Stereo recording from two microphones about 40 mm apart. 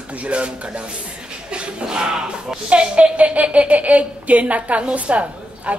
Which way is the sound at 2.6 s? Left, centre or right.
Right.